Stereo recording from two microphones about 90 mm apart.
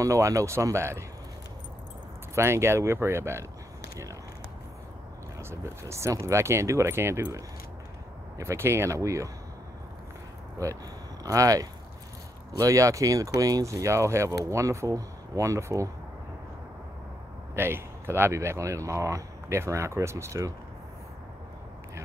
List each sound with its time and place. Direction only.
0.0 s speech: 35° right (ahead or behind)
2.3 s speech: 30° right (ahead or behind)
5.4 s speech: 30° right (ahead or behind)
11.2 s speech: 40° right (ahead or behind)
17.6 s speech: 25° right (ahead or behind)